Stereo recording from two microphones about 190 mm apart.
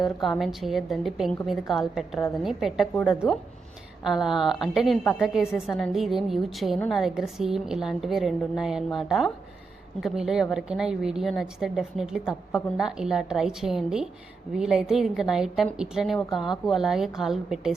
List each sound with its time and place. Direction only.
0.0 s a woman's voice: centre (ahead or behind)
3.2 s speech: 20° left (ahead or behind)
4.0 s a woman's voice: centre (ahead or behind)